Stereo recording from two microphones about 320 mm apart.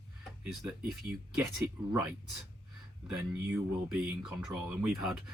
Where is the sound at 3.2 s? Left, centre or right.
Centre.